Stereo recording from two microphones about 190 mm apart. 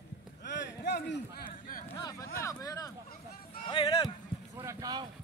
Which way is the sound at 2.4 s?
20° left (ahead or behind).